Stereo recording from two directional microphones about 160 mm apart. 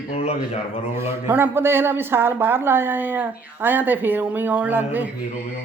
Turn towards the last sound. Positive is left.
turn(degrees=-10)  # may be behind; listen again after turning